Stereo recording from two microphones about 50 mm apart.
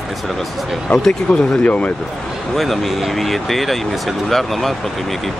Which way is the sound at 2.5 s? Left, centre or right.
Centre.